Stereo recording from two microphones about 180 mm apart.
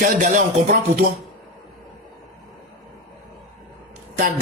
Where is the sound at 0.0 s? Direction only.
45° right (ahead or behind).